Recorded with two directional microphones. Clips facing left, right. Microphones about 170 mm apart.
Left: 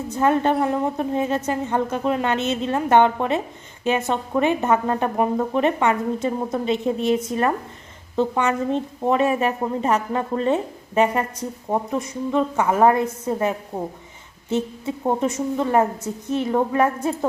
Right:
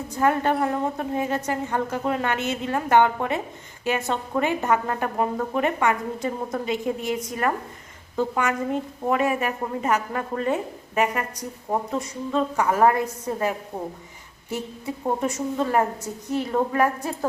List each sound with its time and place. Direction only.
0.1 s a woman's voice: 20° left (ahead or behind)
11.9 s a woman's voice: 20° left (ahead or behind)